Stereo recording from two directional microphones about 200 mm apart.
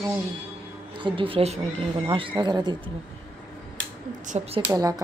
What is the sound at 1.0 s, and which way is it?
Speech, 25° right (ahead or behind).